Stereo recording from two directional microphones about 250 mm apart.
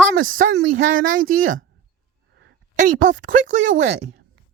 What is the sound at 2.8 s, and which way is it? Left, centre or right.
Speech, right.